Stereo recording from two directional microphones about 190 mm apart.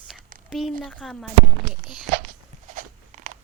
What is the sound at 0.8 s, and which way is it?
Speech, 5° left (ahead or behind).